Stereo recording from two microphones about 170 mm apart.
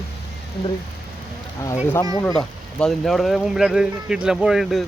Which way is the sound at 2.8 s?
Centre (ahead or behind).